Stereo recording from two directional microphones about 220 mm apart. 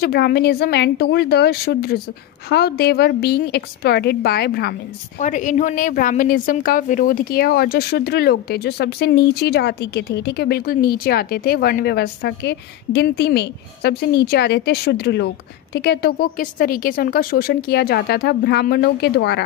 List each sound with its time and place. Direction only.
0.0 s speech: 45° left (ahead or behind)
5.2 s speech: 35° left (ahead or behind)